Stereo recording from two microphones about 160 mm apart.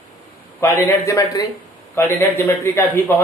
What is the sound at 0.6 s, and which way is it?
A man's voice, 20° left (ahead or behind).